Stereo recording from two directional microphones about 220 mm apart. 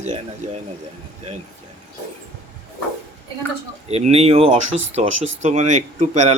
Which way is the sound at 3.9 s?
30° right (ahead or behind).